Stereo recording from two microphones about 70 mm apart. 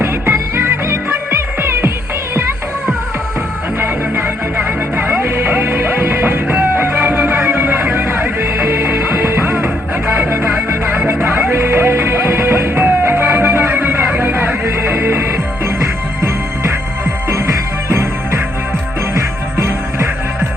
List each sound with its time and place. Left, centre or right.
0.0 s music: right
3.8 s music: right